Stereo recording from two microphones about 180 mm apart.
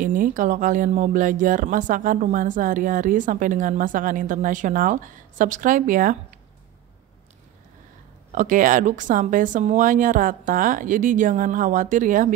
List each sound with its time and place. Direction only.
0.0 s speech: 50° right (ahead or behind)
8.3 s speech: 45° right (ahead or behind)